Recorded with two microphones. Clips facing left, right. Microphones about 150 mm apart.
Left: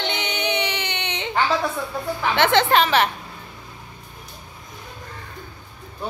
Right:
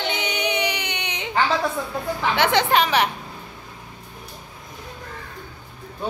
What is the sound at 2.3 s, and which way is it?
Speech, 10° right (ahead or behind).